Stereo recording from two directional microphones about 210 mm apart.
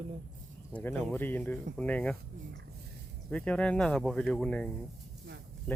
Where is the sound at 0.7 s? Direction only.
10° left (ahead or behind).